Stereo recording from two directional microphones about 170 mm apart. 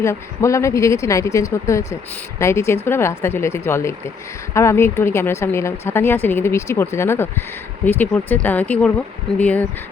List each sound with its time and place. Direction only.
0.0 s a woman's voice: 15° left (ahead or behind)